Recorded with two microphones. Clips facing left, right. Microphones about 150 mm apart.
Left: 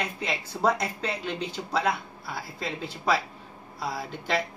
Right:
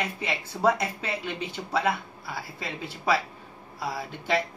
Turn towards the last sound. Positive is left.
turn(degrees=-5)  # may be behind; listen again after turning